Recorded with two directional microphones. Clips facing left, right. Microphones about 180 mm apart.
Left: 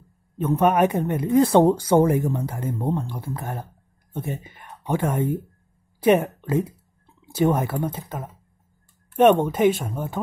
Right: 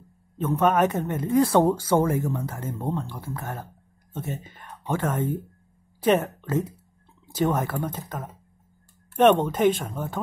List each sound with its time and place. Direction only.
0.5 s speech: 15° left (ahead or behind)